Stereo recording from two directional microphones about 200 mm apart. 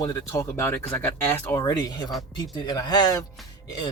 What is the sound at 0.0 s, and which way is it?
Speech, 15° left (ahead or behind).